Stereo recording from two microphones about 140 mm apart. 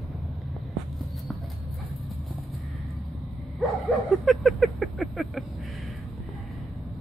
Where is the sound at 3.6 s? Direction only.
Centre (ahead or behind).